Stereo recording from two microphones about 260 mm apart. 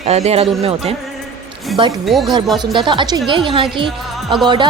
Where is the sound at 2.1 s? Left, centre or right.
Centre.